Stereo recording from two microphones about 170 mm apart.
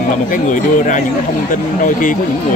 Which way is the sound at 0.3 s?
50° left (ahead or behind).